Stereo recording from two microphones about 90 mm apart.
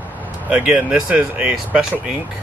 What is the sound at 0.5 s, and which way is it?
Speech, 15° right (ahead or behind).